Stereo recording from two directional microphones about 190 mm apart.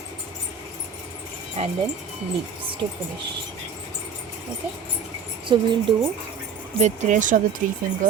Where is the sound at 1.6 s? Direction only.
35° right (ahead or behind).